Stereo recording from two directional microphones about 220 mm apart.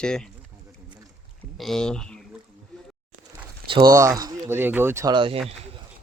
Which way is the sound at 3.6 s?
20° right (ahead or behind).